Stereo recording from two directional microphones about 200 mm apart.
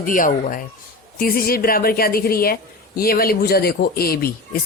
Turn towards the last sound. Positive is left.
turn(degrees=50)  # may be behind; listen again after turning